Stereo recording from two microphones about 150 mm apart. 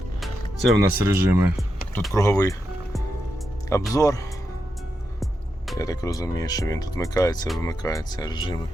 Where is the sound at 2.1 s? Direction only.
20° left (ahead or behind).